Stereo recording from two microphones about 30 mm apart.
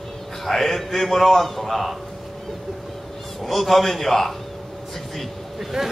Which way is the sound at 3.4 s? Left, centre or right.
Centre.